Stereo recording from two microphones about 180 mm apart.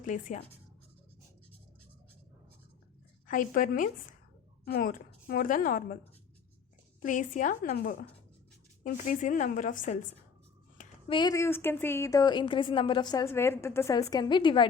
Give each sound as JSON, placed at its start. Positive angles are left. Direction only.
{"t": 0.0, "sound": "a woman's voice", "side_deg": 45}
{"t": 3.2, "sound": "a woman's voice", "side_deg": 50}
{"t": 7.0, "sound": "a woman's voice", "side_deg": 45}
{"t": 11.1, "sound": "a woman's voice", "side_deg": 20}